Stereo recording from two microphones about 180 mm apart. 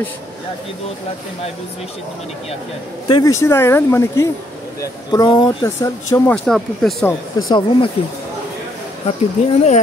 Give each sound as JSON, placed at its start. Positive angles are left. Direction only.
{"t": 3.1, "sound": "speech", "side_deg": 20}
{"t": 6.3, "sound": "speech", "side_deg": 5}
{"t": 7.1, "sound": "speech", "side_deg": 25}
{"t": 9.0, "sound": "speech", "side_deg": 35}